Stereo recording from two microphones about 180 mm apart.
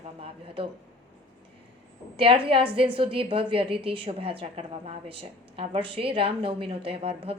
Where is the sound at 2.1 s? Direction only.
30° right (ahead or behind).